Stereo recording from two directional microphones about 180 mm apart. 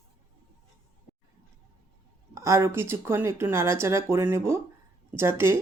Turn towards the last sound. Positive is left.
turn(degrees=-15)  # may be behind; listen again after turning